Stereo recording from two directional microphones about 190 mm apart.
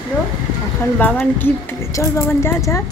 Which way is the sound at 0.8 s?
10° left (ahead or behind).